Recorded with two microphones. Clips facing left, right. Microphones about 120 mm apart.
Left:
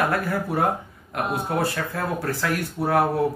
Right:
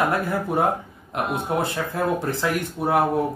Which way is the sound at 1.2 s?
20° right (ahead or behind).